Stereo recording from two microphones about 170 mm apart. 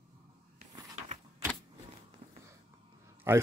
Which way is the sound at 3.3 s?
15° right (ahead or behind).